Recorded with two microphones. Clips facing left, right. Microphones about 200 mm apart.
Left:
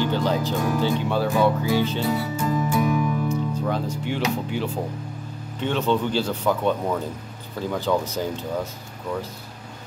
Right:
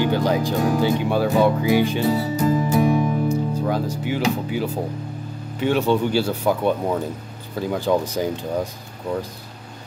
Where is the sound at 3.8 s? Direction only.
5° right (ahead or behind).